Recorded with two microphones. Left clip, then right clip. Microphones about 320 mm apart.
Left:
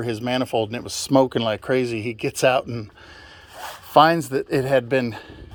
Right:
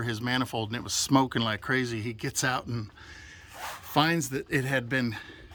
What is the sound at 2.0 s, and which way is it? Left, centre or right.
Speech, centre.